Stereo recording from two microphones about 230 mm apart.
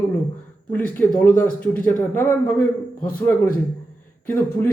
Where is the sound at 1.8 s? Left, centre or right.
Centre.